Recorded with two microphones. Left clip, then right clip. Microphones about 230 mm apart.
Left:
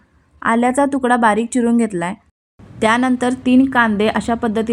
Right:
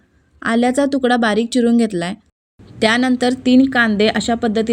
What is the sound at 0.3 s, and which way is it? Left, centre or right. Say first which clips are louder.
A woman's voice: left 1 dB; centre.